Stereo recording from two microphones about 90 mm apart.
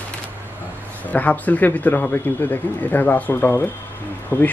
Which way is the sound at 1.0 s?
15° left (ahead or behind).